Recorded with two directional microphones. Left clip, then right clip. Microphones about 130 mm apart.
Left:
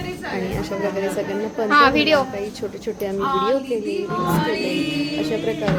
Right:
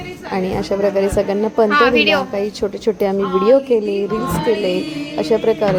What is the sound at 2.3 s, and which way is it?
A woman's voice, 40° right (ahead or behind).